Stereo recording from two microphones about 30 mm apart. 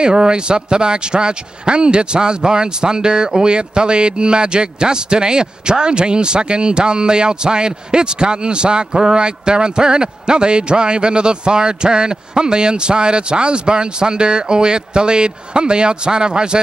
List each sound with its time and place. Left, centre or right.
0.0 s a man's voice: right